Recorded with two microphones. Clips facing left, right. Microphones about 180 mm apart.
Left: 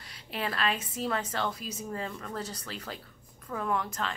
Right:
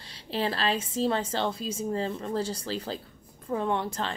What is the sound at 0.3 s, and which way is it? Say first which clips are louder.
A woman's voice: right 4 dB; 30° right (ahead or behind).